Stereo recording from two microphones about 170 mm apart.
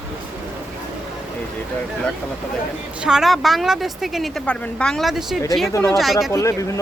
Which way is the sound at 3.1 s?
Centre (ahead or behind).